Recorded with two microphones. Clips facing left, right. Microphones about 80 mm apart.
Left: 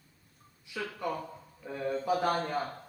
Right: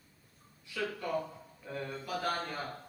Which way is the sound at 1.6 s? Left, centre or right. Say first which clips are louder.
Left 9 dB; centre.